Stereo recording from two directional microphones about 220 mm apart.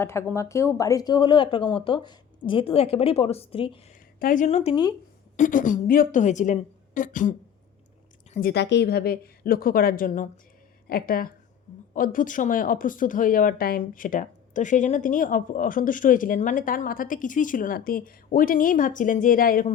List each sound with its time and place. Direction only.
0.0 s a woman's voice: 10° left (ahead or behind)
4.2 s a woman's voice: 35° left (ahead or behind); by 4.9 s 20° left (ahead or behind)
5.4 s speech: 35° left (ahead or behind)